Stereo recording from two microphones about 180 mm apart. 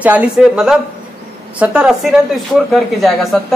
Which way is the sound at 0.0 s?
10° right (ahead or behind).